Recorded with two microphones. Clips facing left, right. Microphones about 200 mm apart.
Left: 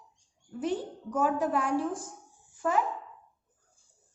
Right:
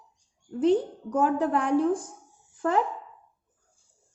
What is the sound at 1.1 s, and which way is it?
A woman's voice, 60° right (ahead or behind).